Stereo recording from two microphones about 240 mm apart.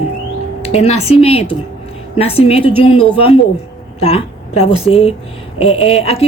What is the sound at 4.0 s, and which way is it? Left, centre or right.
Speech, left.